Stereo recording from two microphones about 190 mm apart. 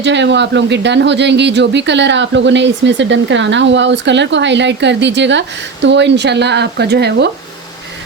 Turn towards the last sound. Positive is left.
turn(degrees=-60)  # may be behind; listen again after turning